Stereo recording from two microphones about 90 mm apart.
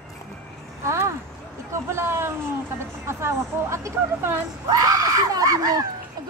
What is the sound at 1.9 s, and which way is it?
Speech, 30° right (ahead or behind).